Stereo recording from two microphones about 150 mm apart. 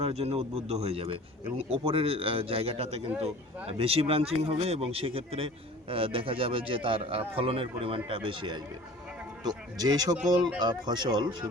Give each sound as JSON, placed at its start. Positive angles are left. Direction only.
{"t": 0.0, "sound": "a man's voice", "side_deg": -45}